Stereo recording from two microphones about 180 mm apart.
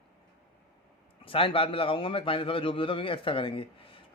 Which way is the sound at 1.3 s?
30° left (ahead or behind).